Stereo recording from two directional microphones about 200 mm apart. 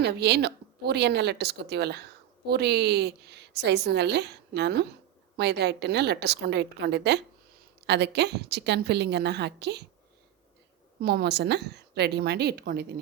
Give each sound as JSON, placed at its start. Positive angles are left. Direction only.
{"t": 0.0, "sound": "a woman's voice", "side_deg": -55}
{"t": 11.0, "sound": "a woman's voice", "side_deg": -55}